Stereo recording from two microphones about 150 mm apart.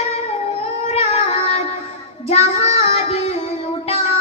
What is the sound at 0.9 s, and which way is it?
Child singing, 45° left (ahead or behind).